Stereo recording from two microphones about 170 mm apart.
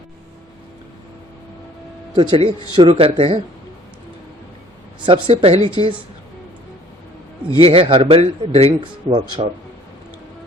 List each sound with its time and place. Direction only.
2.1 s speech: 30° right (ahead or behind)
5.0 s speech: 30° right (ahead or behind)
7.6 s speech: 30° right (ahead or behind)